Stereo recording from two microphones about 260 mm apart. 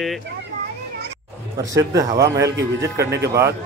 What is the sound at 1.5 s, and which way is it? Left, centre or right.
Speech, centre.